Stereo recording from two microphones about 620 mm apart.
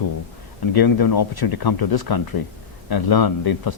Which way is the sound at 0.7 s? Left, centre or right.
Left.